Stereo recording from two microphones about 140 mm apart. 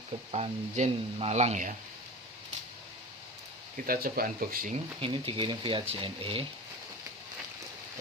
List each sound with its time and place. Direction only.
0.3 s speech: 45° right (ahead or behind)
3.8 s speech: 90° right
4.9 s speech: 40° right (ahead or behind)